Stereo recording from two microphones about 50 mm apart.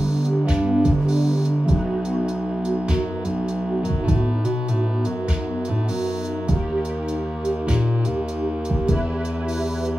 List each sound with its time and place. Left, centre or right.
0.6 s music: right